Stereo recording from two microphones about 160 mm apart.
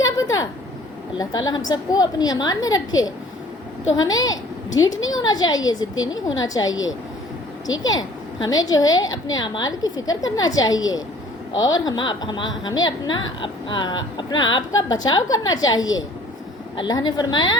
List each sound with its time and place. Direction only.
0.0 s vehicle: 20° left (ahead or behind)
1.2 s a woman's voice: 25° left (ahead or behind)
7.8 s a woman's voice: 25° left (ahead or behind)